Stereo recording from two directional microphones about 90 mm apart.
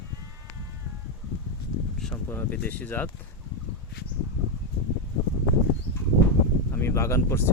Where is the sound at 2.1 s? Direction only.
20° left (ahead or behind).